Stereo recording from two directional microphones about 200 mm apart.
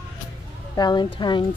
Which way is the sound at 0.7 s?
20° left (ahead or behind).